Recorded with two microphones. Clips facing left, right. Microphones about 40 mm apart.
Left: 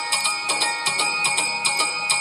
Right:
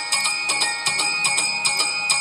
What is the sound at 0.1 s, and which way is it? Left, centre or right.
Music, centre.